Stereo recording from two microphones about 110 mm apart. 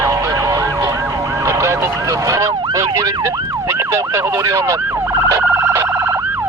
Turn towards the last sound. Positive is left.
turn(degrees=-15)  # may be behind; listen again after turning